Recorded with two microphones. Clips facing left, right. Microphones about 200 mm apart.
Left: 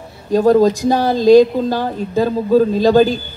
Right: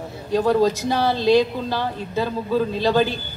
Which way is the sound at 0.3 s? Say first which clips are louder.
Left 6 dB; 45° left (ahead or behind).